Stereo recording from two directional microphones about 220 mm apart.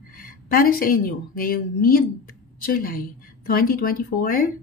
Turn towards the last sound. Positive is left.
turn(degrees=40)  # may be behind; listen again after turning